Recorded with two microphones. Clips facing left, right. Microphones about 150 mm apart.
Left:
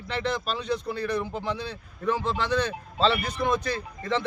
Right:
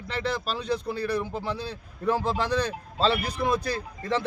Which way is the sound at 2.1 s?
40° right (ahead or behind).